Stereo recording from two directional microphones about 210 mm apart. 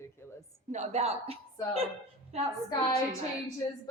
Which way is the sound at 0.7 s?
30° right (ahead or behind).